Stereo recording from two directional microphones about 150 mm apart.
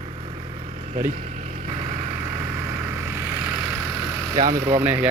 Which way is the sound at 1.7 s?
50° right (ahead or behind).